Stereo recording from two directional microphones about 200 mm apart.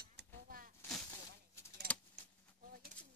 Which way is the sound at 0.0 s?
55° right (ahead or behind).